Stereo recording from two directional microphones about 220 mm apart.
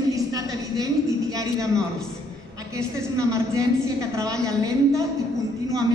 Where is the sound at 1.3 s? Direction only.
15° right (ahead or behind).